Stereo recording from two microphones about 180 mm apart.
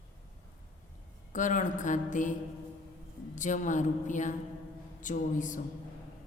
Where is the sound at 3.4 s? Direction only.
45° left (ahead or behind).